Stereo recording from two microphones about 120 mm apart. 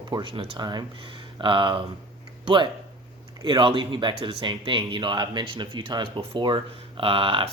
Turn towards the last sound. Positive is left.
turn(degrees=-45)  # may be behind; listen again after turning